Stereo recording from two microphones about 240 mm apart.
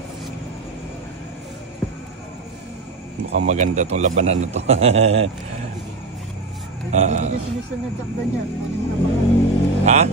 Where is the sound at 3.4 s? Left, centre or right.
Right.